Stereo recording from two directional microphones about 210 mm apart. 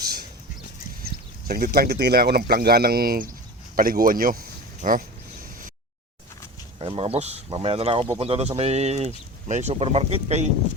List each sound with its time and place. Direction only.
1.0 s speech: 45° right (ahead or behind)
6.7 s speech: 25° right (ahead or behind)